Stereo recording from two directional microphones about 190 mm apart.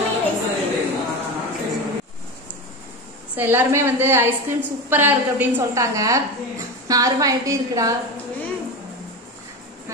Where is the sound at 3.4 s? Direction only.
10° right (ahead or behind).